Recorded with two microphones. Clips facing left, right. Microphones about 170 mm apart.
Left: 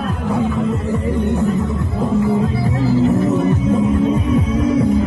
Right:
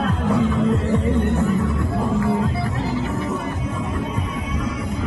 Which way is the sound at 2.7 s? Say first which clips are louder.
Left 9 dB; 40° left (ahead or behind).